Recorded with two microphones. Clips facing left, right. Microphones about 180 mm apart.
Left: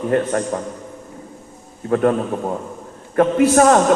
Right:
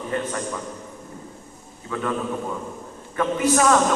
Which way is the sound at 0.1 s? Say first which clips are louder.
Left 8 dB; 50° left (ahead or behind).